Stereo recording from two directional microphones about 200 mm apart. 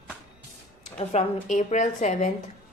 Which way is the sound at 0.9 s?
35° left (ahead or behind).